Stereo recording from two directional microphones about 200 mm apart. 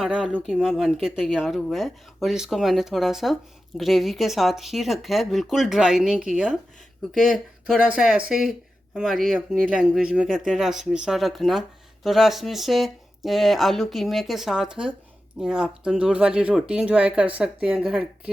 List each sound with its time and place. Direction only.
0.0 s speech: 5° right (ahead or behind)